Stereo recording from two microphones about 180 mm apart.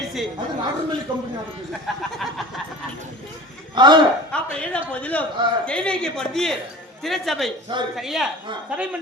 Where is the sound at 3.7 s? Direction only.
25° right (ahead or behind).